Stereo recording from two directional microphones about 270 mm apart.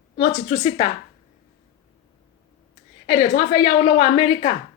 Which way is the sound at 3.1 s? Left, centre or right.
Centre.